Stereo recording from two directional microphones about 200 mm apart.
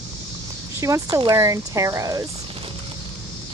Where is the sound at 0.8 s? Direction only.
15° right (ahead or behind).